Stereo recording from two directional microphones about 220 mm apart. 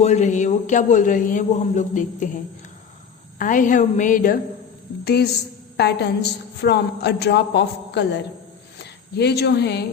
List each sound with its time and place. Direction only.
0.0 s a man's voice: 30° left (ahead or behind); by 9.8 s 50° left (ahead or behind)